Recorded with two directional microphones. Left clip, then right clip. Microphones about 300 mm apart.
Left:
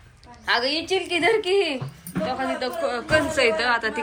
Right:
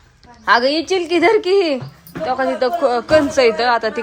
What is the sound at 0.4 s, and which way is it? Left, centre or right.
A woman's voice, right.